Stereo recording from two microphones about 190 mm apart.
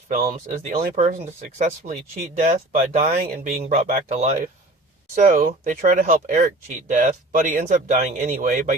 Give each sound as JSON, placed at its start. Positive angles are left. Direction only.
{"t": 0.7, "sound": "speech", "side_deg": -45}